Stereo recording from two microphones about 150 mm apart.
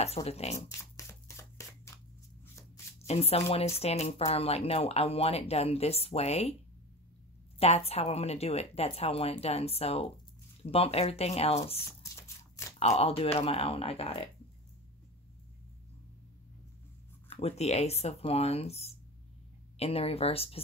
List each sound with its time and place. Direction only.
0.0 s speech: 45° left (ahead or behind)
0.6 s a sound: 20° left (ahead or behind)
3.1 s speech: 45° left (ahead or behind)
7.5 s speech: 40° left (ahead or behind)
12.0 s shuffling cards: 20° left (ahead or behind)
12.7 s speech: 45° left (ahead or behind)
17.3 s speech: 45° left (ahead or behind)